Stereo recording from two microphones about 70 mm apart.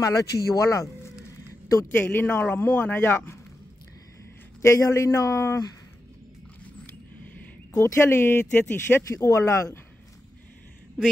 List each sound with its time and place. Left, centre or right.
0.0 s speech: left
2.0 s speech: left
4.6 s speech: left
7.7 s speech: left